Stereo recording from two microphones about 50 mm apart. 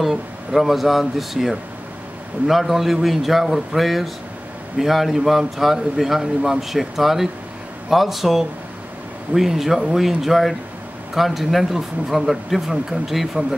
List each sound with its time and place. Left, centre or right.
0.0 s speech: centre